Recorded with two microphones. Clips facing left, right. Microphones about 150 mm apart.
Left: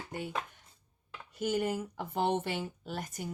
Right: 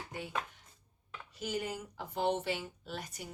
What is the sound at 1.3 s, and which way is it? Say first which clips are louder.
Speech: left 6 dB; 50° left (ahead or behind).